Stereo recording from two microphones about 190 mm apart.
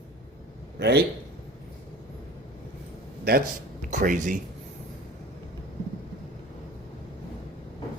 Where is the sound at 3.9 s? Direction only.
40° right (ahead or behind).